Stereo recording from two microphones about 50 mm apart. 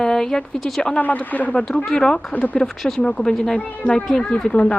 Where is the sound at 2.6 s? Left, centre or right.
Centre.